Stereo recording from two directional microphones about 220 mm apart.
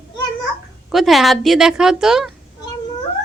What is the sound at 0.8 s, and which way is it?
A woman's voice, centre (ahead or behind).